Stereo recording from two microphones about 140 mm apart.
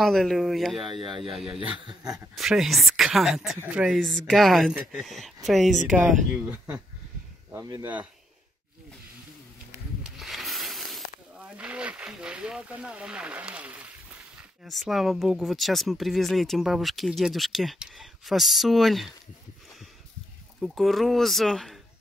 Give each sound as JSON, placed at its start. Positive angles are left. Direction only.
{"t": 0.0, "sound": "speech", "side_deg": 0}
{"t": 0.9, "sound": "speech", "side_deg": -35}
{"t": 2.0, "sound": "speech", "side_deg": -5}
{"t": 7.5, "sound": "speech", "side_deg": -25}
{"t": 10.0, "sound": "speech", "side_deg": 0}
{"t": 20.6, "sound": "speech", "side_deg": 0}